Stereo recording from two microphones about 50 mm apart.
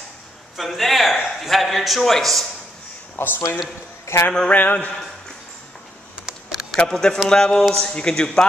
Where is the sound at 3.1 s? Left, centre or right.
Left.